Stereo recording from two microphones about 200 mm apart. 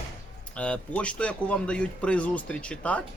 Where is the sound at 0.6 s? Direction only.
5° left (ahead or behind).